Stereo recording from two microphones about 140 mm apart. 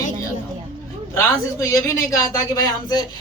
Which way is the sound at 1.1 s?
20° left (ahead or behind).